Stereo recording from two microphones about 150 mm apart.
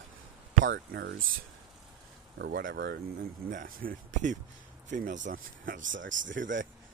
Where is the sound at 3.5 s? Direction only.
65° right (ahead or behind).